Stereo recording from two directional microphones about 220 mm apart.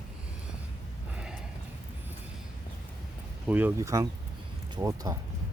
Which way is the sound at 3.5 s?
10° right (ahead or behind).